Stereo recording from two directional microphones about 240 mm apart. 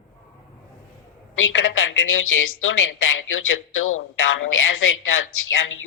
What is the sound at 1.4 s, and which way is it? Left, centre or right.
A woman's voice, left.